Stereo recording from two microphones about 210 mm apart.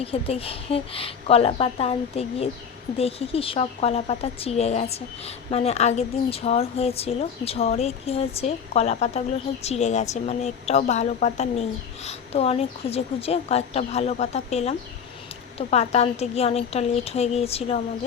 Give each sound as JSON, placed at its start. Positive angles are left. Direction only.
{"t": 0.0, "sound": "a woman's voice", "side_deg": 25}